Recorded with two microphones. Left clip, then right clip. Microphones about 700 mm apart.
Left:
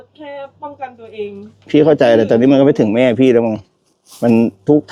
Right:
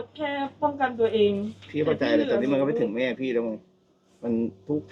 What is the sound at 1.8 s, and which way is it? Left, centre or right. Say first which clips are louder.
Speech: left 13 dB; left.